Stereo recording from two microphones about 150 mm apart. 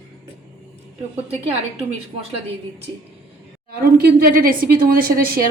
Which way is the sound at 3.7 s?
90° right.